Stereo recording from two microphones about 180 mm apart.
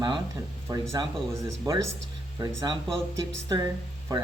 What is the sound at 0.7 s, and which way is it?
Speech, 20° right (ahead or behind).